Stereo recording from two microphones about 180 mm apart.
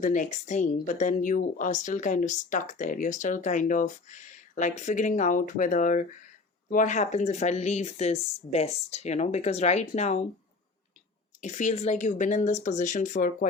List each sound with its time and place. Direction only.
0.0 s a woman's voice: 45° left (ahead or behind)
11.3 s a woman's voice: 45° left (ahead or behind)